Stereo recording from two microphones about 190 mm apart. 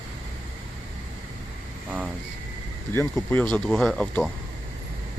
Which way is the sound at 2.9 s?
10° left (ahead or behind).